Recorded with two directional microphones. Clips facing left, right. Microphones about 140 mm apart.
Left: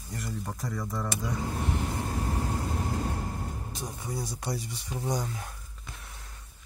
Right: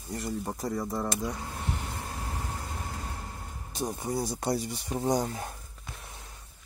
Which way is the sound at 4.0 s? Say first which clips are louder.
Right 4 dB; 40° right (ahead or behind).